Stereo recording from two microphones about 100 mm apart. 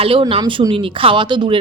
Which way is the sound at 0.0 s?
65° right (ahead or behind).